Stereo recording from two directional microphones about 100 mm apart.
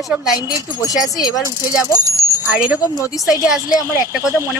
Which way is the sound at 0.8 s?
40° left (ahead or behind).